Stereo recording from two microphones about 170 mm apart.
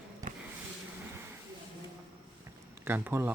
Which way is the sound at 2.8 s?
15° right (ahead or behind).